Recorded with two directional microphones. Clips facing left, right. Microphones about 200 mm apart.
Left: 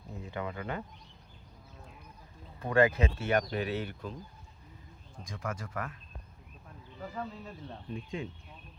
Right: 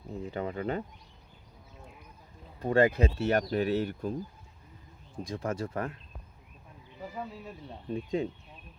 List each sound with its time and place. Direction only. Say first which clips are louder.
0.3 s speech: right 4 dB; 35° right (ahead or behind)
2.6 s speech: right 2 dB; 35° right (ahead or behind)
5.2 s speech: right 6 dB; 30° right (ahead or behind)
7.0 s speech: even; 10° right (ahead or behind)
7.9 s speech: right 8 dB; 35° right (ahead or behind)